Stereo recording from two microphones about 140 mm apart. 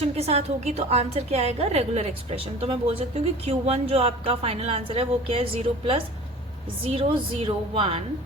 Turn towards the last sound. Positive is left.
turn(degrees=-40)  # may be behind; listen again after turning